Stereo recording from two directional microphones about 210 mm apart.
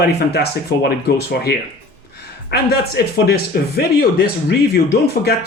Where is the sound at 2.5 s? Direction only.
50° left (ahead or behind).